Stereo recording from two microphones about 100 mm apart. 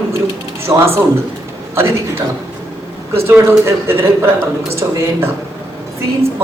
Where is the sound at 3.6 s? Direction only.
25° right (ahead or behind).